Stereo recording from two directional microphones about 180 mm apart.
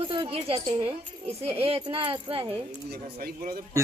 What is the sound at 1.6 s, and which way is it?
Speech, 30° right (ahead or behind).